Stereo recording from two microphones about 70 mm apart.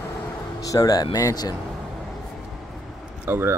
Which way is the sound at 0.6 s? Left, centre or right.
Left.